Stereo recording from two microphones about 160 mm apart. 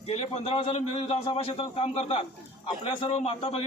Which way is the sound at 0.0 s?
40° left (ahead or behind).